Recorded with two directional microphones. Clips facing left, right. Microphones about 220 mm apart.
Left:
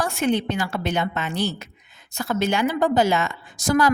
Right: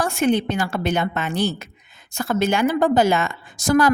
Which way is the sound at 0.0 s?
50° right (ahead or behind).